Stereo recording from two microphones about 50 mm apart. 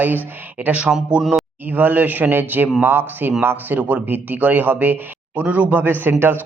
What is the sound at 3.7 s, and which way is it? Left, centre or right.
Speech, right.